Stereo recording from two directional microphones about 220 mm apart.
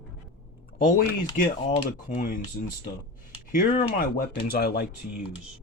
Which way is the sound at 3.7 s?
35° left (ahead or behind).